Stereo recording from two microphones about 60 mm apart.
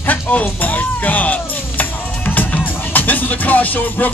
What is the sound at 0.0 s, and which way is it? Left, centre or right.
Music, left.